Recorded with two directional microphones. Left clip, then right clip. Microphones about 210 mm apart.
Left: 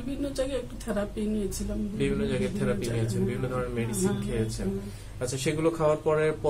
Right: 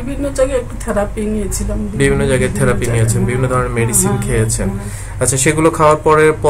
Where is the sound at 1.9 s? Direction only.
45° right (ahead or behind).